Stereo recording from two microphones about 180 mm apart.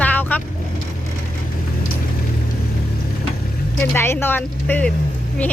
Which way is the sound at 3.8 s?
10° left (ahead or behind).